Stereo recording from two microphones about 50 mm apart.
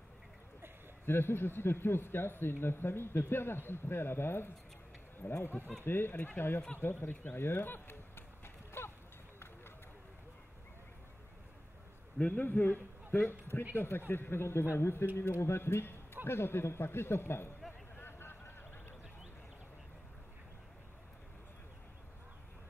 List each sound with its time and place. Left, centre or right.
1.0 s speech: left
5.6 s speech: right
5.9 s speech: left
8.8 s a sound: left
12.2 s a man's voice: left
18.0 s a sound: left